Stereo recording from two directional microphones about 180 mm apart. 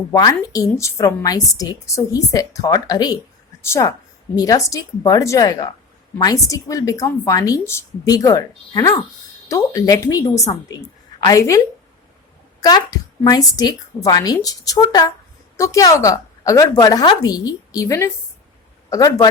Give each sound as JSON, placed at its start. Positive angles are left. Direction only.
{"t": 0.1, "sound": "a woman's voice", "side_deg": 20}